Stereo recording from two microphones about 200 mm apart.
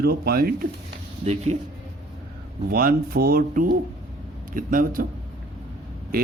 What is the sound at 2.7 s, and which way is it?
A man's voice, 50° right (ahead or behind).